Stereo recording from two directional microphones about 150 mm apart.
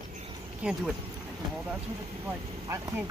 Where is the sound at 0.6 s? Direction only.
5° right (ahead or behind).